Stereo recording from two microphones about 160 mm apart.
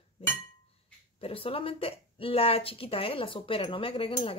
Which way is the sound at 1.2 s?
35° left (ahead or behind).